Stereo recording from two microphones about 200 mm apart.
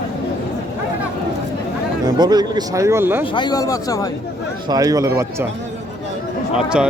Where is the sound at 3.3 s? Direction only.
20° left (ahead or behind).